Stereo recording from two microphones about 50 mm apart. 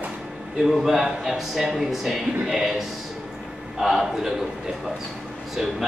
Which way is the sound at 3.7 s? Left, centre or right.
Centre.